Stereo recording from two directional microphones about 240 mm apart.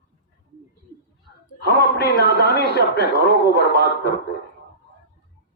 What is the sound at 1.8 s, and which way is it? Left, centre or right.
A man's voice, left.